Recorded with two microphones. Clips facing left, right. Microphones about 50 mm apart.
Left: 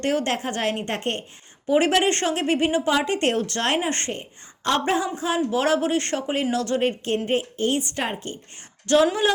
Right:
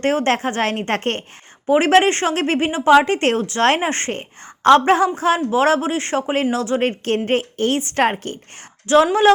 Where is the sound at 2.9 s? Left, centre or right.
Right.